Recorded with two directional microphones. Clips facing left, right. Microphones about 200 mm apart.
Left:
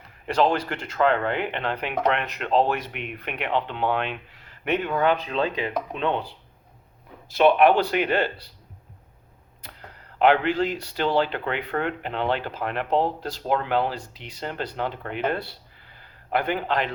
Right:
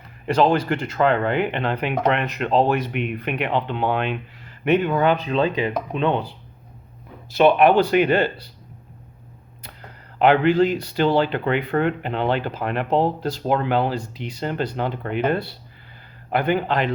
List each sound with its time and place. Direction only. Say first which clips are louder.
0.5 s speech: right 6 dB; 10° right (ahead or behind)
5.1 s speech: right 5 dB; centre (ahead or behind)
7.3 s speech: right 3 dB; 5° right (ahead or behind)
10.2 s speech: right 4 dB; 10° right (ahead or behind)
14.2 s speech: right 10 dB; 45° right (ahead or behind)
14.4 s speech: right 4 dB; 10° right (ahead or behind)